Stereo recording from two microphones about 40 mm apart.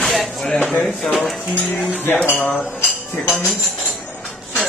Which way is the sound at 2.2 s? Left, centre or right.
Left.